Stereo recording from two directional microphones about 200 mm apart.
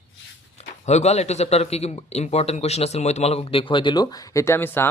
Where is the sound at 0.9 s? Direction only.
35° left (ahead or behind).